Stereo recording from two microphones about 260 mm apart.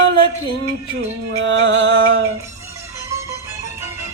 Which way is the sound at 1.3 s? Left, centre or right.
Right.